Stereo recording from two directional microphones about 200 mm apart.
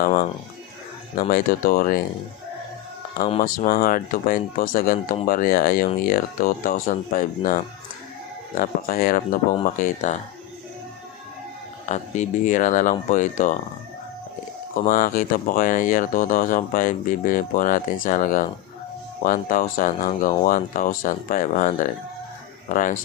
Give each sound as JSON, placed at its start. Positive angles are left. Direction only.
{"t": 0.0, "sound": "speech", "side_deg": 35}
{"t": 3.3, "sound": "speech", "side_deg": 40}
{"t": 11.9, "sound": "speech", "side_deg": 40}
{"t": 14.8, "sound": "speech", "side_deg": 45}